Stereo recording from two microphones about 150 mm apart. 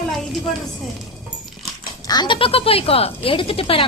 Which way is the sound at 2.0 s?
25° left (ahead or behind).